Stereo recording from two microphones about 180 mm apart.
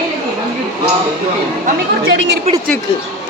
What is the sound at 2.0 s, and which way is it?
Speech, 90° right.